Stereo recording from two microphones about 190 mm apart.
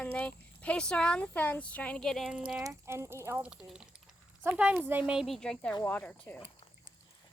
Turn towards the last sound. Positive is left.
turn(degrees=10)  # may be behind; listen again after turning